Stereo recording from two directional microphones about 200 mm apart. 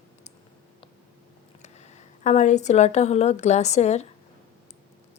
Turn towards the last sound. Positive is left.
turn(degrees=35)  # may be behind; listen again after turning